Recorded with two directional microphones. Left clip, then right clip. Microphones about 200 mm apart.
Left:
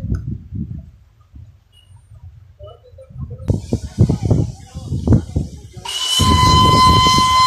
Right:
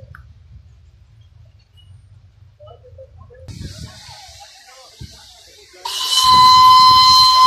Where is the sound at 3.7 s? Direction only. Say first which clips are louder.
Left 15 dB; 35° left (ahead or behind).